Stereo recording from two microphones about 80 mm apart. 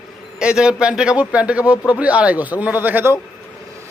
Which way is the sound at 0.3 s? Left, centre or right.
Centre.